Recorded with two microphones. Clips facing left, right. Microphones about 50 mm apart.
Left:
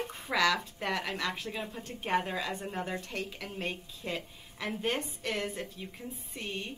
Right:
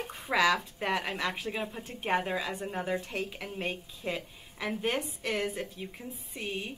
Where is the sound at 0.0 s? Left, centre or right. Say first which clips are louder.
Right 2 dB; centre.